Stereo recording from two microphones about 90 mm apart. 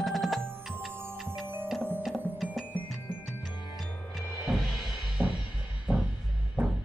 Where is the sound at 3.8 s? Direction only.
Centre (ahead or behind).